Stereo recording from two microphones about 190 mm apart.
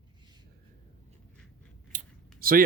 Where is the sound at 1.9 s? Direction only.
45° right (ahead or behind).